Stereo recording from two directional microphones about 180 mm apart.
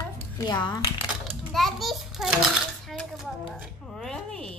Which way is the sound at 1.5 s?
Centre (ahead or behind).